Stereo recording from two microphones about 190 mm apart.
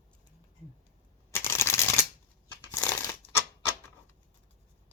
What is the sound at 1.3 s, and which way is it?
Shuffling cards, 15° left (ahead or behind).